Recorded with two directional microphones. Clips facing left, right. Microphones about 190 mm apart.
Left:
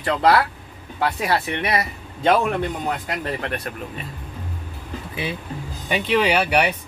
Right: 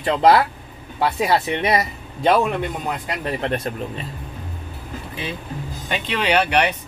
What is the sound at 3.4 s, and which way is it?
Speech, 25° right (ahead or behind).